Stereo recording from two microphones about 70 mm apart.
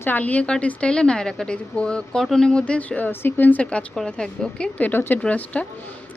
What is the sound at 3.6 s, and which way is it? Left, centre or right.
A woman's voice, centre.